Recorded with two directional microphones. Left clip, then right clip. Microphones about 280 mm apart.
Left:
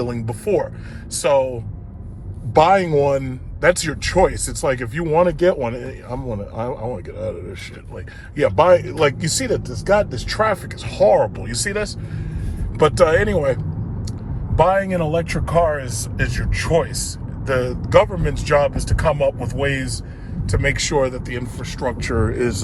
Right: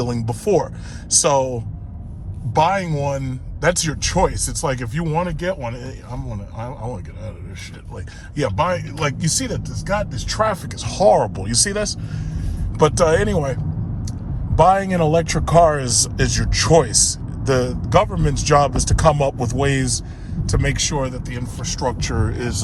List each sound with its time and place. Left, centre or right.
0.0 s speech: centre
2.6 s speech: centre
5.2 s speech: centre
8.5 s speech: centre
10.2 s speech: centre
22.1 s speech: centre